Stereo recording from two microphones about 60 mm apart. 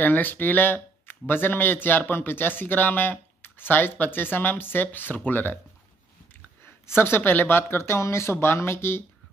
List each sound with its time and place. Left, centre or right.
0.0 s speech: left
6.6 s speech: left